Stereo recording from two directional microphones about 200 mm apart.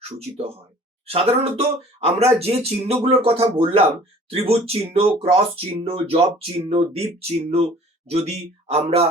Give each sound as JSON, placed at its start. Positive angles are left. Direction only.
{"t": 0.2, "sound": "speech", "side_deg": -30}